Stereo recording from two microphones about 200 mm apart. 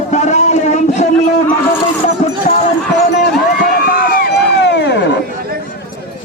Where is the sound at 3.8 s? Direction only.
45° left (ahead or behind).